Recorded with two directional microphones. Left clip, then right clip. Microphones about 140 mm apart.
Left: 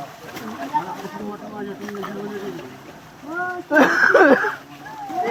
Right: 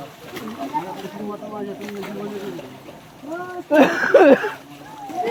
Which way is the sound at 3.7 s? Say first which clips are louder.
Even; 90° right.